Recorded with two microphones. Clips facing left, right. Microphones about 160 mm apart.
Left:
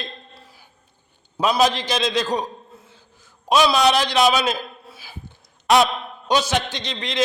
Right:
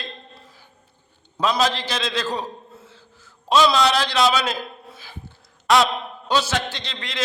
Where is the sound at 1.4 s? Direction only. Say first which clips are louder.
Left 2 dB; 15° left (ahead or behind).